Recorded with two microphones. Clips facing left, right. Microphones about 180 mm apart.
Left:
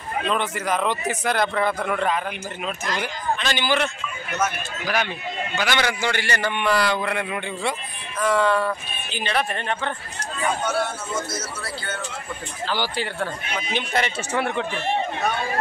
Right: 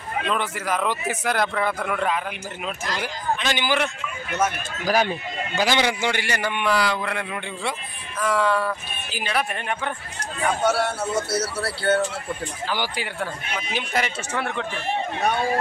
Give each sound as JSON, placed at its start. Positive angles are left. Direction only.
{"t": 0.3, "sound": "a man's voice", "side_deg": 0}
{"t": 4.4, "sound": "speech", "side_deg": -40}
{"t": 5.6, "sound": "a man's voice", "side_deg": -25}
{"t": 10.6, "sound": "speech", "side_deg": -75}
{"t": 12.6, "sound": "a man's voice", "side_deg": -15}
{"t": 14.4, "sound": "speech", "side_deg": 15}